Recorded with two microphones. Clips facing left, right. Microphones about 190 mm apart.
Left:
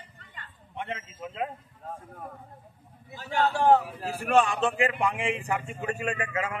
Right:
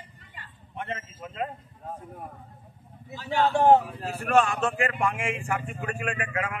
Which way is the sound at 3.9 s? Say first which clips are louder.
Even; 15° left (ahead or behind).